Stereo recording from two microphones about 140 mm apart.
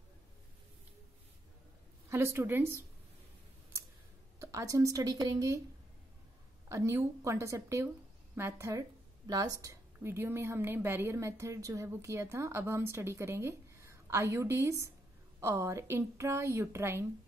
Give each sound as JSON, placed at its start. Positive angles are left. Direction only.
{"t": 2.0, "sound": "a woman's voice", "side_deg": -20}
{"t": 4.4, "sound": "a woman's voice", "side_deg": -20}
{"t": 6.7, "sound": "a woman's voice", "side_deg": -20}